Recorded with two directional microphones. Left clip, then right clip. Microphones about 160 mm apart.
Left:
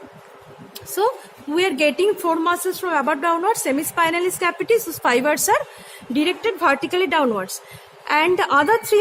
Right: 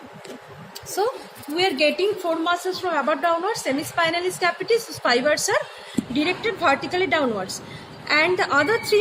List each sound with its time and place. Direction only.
1.5 s a woman's voice: 90° left